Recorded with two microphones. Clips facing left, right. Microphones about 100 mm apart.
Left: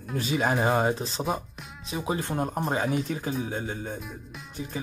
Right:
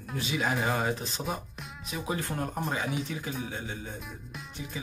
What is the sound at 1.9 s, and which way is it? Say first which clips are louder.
Speech: left 4 dB; 30° left (ahead or behind).